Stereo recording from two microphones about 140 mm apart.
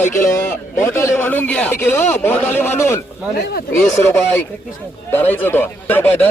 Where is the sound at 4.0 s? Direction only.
15° left (ahead or behind).